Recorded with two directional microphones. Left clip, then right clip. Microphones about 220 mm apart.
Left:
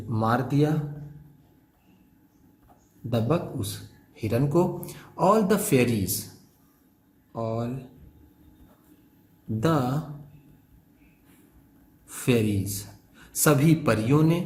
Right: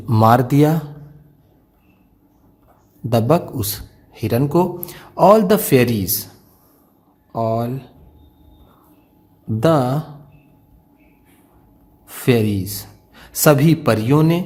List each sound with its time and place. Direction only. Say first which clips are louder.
0.1 s speech: right 12 dB; 45° right (ahead or behind)
3.1 s a man's voice: right 10 dB; 45° right (ahead or behind)
7.3 s a man's voice: right 10 dB; 30° right (ahead or behind)
9.6 s a man's voice: right 10 dB; 30° right (ahead or behind)
12.0 s speech: right 7 dB; 30° right (ahead or behind)